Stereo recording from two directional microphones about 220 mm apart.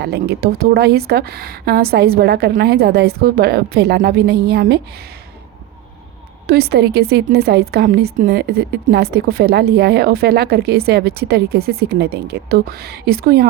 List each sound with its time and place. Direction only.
0.0 s a woman's voice: 45° right (ahead or behind)
6.5 s a woman's voice: 45° right (ahead or behind)